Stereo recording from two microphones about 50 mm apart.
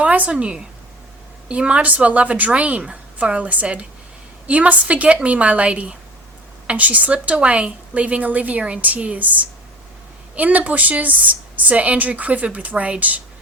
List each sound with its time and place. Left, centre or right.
0.0 s a woman's voice: right